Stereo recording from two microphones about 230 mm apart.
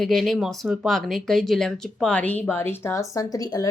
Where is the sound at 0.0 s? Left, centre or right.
Centre.